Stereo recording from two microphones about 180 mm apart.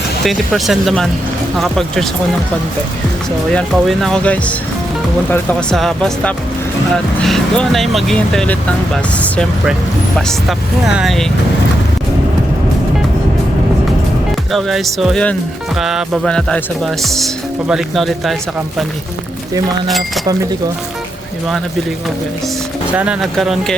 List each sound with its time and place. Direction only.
0.3 s speech: centre (ahead or behind)
3.5 s speech: centre (ahead or behind)
10.8 s speech: centre (ahead or behind)
14.5 s speech: centre (ahead or behind)
20.2 s speech: 20° right (ahead or behind)
23.0 s speech: 5° right (ahead or behind)